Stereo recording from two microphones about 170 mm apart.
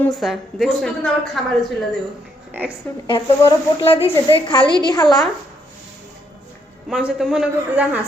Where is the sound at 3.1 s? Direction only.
30° left (ahead or behind).